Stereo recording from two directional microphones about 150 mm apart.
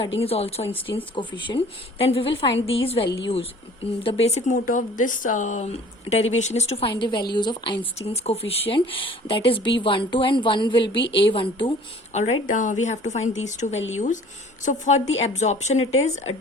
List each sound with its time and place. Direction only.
0.0 s speech: 40° left (ahead or behind)
7.0 s a woman's voice: 30° left (ahead or behind)
7.9 s speech: 45° left (ahead or behind)
12.1 s speech: 50° left (ahead or behind)